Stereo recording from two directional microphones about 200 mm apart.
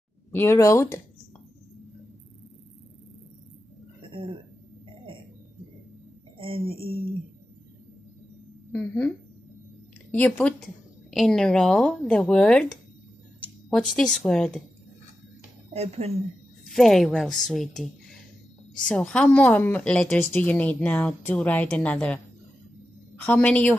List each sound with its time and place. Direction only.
0.3 s speech: 10° left (ahead or behind)
6.3 s a sound: 25° right (ahead or behind)
8.7 s speech: 10° left (ahead or behind)
10.1 s speech: 5° left (ahead or behind)
15.7 s speech: 30° right (ahead or behind)
16.6 s speech: centre (ahead or behind)
18.9 s speech: 5° left (ahead or behind)